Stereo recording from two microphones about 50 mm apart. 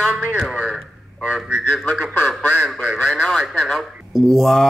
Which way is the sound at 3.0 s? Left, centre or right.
Centre.